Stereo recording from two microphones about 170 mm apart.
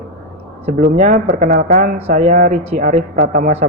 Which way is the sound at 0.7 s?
50° right (ahead or behind).